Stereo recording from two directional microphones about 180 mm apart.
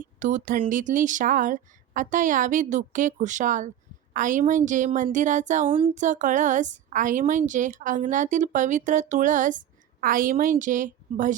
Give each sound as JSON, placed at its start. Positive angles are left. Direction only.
{"t": 0.0, "sound": "speech", "side_deg": -45}
{"t": 5.6, "sound": "speech", "side_deg": -30}